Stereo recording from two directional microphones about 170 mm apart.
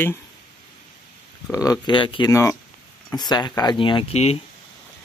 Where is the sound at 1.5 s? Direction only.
20° left (ahead or behind); by 4.4 s 40° left (ahead or behind).